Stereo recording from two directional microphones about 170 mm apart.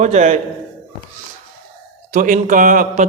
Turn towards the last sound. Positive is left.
turn(degrees=-50)  # may be behind; listen again after turning